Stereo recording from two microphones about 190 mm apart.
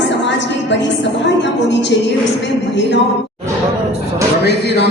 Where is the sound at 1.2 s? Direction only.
70° left (ahead or behind).